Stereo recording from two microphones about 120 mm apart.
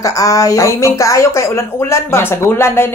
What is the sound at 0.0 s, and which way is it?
Speech, 30° left (ahead or behind).